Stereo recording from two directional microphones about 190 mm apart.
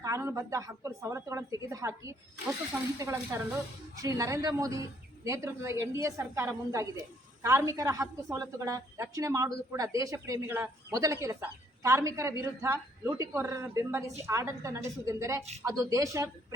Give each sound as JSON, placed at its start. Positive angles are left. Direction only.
{"t": 0.0, "sound": "a woman's voice", "side_deg": -15}